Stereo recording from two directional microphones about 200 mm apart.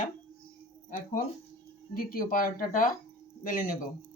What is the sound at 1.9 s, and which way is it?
Speech, 45° left (ahead or behind).